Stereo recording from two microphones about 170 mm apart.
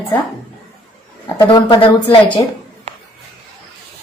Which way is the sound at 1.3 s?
30° left (ahead or behind).